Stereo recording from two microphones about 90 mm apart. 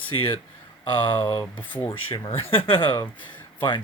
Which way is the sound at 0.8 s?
65° left (ahead or behind).